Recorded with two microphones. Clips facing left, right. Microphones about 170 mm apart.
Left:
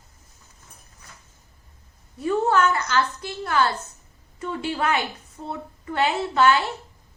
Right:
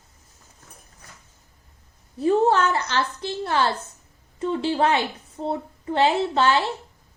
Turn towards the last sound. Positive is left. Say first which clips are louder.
# even
turn(degrees=-30)  # may be behind; listen again after turning